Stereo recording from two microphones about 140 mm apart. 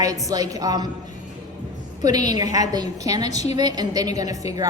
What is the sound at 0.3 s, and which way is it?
Speech, 25° right (ahead or behind).